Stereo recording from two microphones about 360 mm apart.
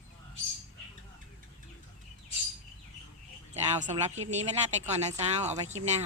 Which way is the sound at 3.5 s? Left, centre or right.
Centre.